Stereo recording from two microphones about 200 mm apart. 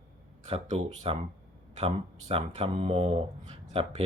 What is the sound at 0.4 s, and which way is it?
Speech, 30° right (ahead or behind).